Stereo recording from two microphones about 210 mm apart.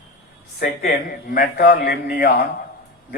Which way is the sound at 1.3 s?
40° left (ahead or behind).